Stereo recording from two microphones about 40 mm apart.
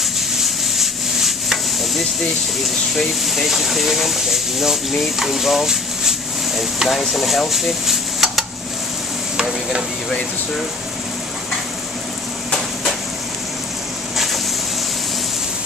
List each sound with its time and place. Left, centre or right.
0.7 s rub: centre
3.3 s speech: centre
9.4 s speech: centre
14.1 s a sound: centre